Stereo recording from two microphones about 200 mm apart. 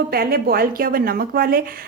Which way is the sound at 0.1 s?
50° right (ahead or behind).